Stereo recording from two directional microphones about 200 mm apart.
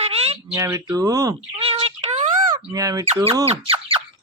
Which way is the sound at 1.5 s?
30° right (ahead or behind).